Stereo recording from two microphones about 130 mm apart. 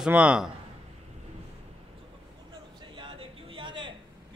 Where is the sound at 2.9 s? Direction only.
40° right (ahead or behind).